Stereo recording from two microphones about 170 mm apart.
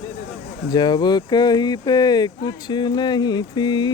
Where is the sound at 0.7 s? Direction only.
25° left (ahead or behind).